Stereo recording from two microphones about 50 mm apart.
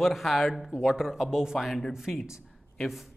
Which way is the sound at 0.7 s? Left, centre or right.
Centre.